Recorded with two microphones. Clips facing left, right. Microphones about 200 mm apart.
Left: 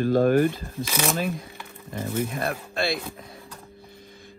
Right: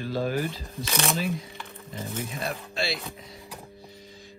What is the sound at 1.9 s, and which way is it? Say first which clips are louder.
Speech: left 7 dB; 55° left (ahead or behind).